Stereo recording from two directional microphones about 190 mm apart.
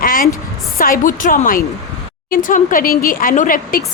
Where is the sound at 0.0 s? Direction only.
50° left (ahead or behind).